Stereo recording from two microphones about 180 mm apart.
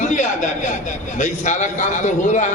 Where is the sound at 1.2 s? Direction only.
40° left (ahead or behind).